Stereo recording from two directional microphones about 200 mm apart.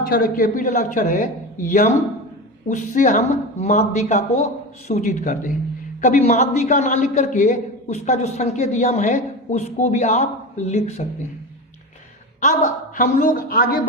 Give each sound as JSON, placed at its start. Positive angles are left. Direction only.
{"t": 0.0, "sound": "a man's voice", "side_deg": 45}
{"t": 12.4, "sound": "a man's voice", "side_deg": 40}